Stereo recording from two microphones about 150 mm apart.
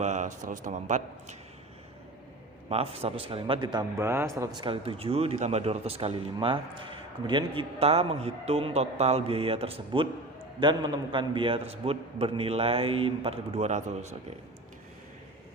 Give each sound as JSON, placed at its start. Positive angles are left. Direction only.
{"t": 0.0, "sound": "a man's voice", "side_deg": -50}
{"t": 2.6, "sound": "a man's voice", "side_deg": -40}
{"t": 3.9, "sound": "a man's voice", "side_deg": -15}
{"t": 4.6, "sound": "a man's voice", "side_deg": -35}